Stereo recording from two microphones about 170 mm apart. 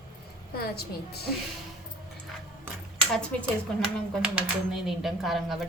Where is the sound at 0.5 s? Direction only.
65° left (ahead or behind).